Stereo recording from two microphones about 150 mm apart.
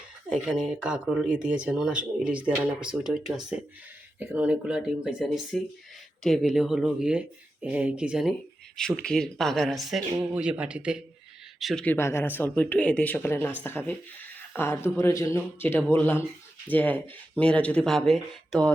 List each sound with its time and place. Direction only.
0.4 s speech: 5° right (ahead or behind)
11.6 s speech: 5° left (ahead or behind)
11.9 s speech: 15° left (ahead or behind); by 18.7 s centre (ahead or behind)